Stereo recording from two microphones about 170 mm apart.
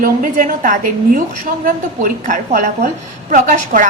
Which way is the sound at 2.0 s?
55° right (ahead or behind).